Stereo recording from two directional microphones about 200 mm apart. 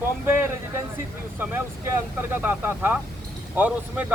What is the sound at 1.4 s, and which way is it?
Speech, 10° right (ahead or behind).